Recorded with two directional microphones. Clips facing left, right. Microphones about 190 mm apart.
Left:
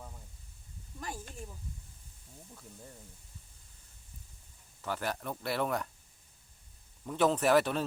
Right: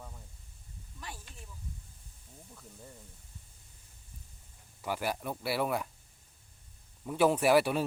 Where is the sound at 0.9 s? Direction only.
45° left (ahead or behind).